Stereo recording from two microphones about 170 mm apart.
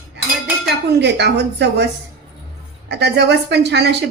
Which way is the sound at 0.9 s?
85° right.